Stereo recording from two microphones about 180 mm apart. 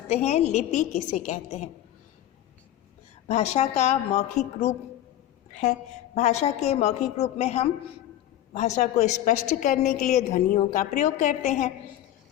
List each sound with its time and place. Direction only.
0.1 s a woman's voice: 35° left (ahead or behind)
3.2 s a woman's voice: 40° left (ahead or behind)
6.1 s a woman's voice: 40° left (ahead or behind)